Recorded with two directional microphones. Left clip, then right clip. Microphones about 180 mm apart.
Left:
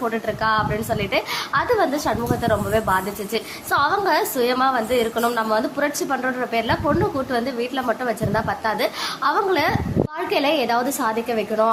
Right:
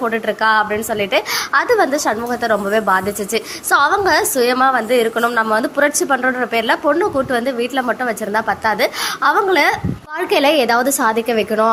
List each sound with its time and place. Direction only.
0.0 s a woman's voice: 25° right (ahead or behind)